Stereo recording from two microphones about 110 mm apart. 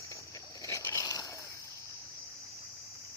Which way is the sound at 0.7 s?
30° left (ahead or behind).